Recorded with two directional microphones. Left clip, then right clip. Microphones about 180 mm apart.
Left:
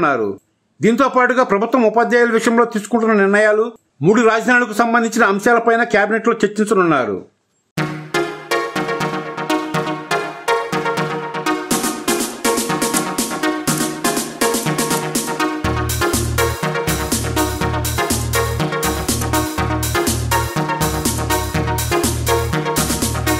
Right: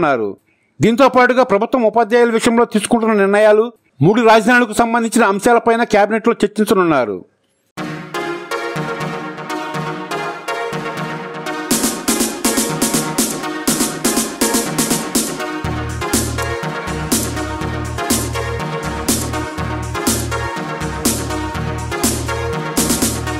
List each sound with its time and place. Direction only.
0.7 s a man's voice: 45° right (ahead or behind)
11.4 s music: centre (ahead or behind)
18.0 s music: centre (ahead or behind)
22.8 s music: centre (ahead or behind)